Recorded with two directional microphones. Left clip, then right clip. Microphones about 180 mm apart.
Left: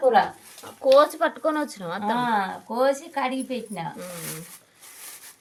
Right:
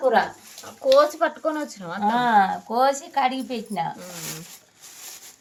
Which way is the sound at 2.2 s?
30° right (ahead or behind).